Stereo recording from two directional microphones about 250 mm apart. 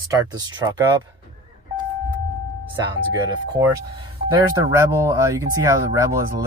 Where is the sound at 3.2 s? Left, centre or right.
Centre.